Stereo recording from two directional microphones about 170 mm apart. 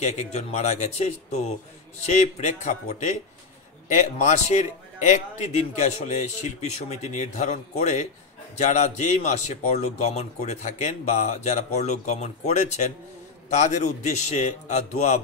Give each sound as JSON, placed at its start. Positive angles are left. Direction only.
{"t": 0.0, "sound": "a man's voice", "side_deg": 40}